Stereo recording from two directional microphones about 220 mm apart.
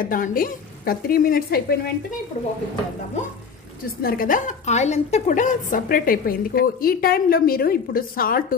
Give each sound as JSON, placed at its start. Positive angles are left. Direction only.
{"t": 0.0, "sound": "a woman's voice", "side_deg": 40}
{"t": 4.0, "sound": "a woman's voice", "side_deg": 40}